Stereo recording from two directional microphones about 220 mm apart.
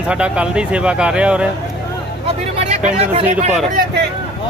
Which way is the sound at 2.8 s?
30° right (ahead or behind).